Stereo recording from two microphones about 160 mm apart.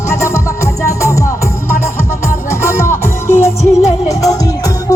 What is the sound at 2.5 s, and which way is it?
Music, 15° left (ahead or behind).